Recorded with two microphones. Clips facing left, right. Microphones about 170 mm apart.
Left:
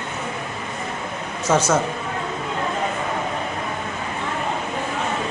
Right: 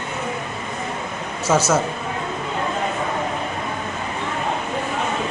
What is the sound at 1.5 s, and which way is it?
Speech, 5° right (ahead or behind).